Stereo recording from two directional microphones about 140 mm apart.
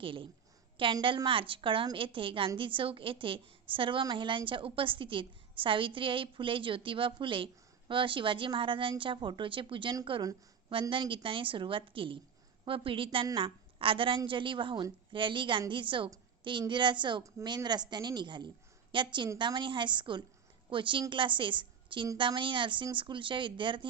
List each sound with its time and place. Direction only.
0.0 s a woman's voice: 40° right (ahead or behind)